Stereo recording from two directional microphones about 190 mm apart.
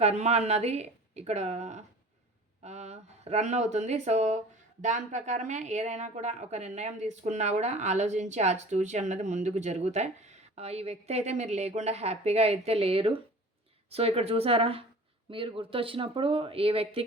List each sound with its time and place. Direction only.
0.0 s a woman's voice: 35° right (ahead or behind)